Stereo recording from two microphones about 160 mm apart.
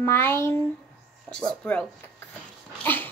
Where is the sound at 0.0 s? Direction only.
15° left (ahead or behind).